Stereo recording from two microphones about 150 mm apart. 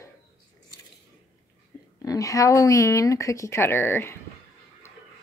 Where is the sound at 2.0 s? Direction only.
25° left (ahead or behind).